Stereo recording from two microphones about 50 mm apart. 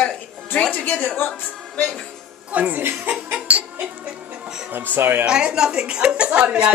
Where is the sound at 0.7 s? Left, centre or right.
Left.